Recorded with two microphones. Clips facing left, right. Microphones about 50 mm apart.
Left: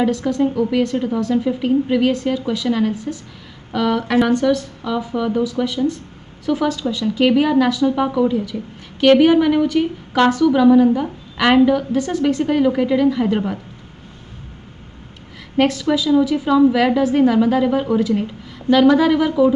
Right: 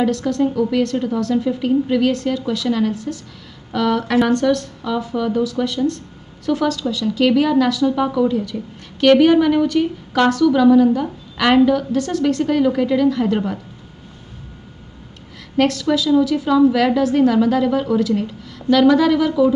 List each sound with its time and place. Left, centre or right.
0.0 s a woman's voice: centre
15.3 s a woman's voice: centre